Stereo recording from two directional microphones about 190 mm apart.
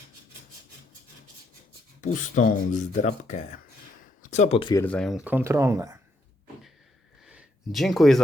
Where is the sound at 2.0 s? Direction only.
40° left (ahead or behind).